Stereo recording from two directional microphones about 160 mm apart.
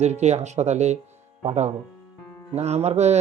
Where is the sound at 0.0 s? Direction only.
45° right (ahead or behind).